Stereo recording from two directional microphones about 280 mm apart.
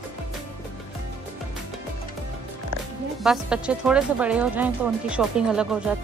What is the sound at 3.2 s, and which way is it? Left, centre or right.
Speech, centre.